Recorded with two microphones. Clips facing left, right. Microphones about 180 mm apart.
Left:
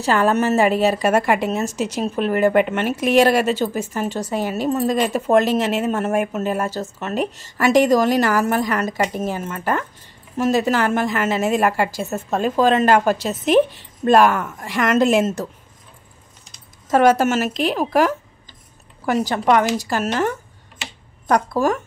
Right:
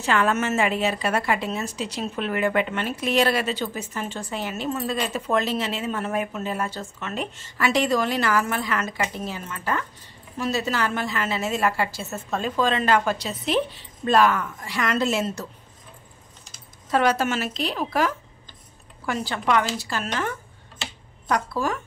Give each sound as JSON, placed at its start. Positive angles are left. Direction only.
{"t": 0.0, "sound": "a woman's voice", "side_deg": 40}
{"t": 2.6, "sound": "speech", "side_deg": 60}
{"t": 3.0, "sound": "a woman's voice", "side_deg": 45}
{"t": 16.9, "sound": "a woman's voice", "side_deg": 45}